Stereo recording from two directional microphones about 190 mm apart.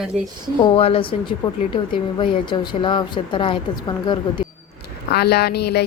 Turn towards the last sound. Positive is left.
turn(degrees=60)  # may be behind; listen again after turning